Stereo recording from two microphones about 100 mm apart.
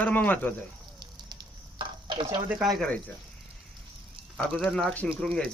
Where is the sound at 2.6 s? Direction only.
Centre (ahead or behind).